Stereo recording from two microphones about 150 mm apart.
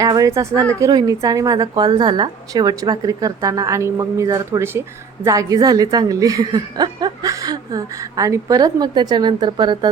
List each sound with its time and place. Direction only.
0.0 s speech: 20° right (ahead or behind)